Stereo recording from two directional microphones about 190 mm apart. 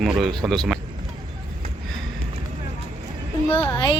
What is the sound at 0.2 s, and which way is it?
Speech, centre (ahead or behind).